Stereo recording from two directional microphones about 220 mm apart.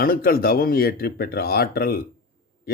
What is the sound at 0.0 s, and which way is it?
Speech, 45° left (ahead or behind).